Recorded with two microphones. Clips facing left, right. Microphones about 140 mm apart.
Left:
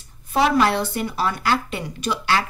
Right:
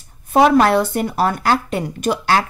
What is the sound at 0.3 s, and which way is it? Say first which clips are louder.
Speech: right 6 dB; 50° right (ahead or behind).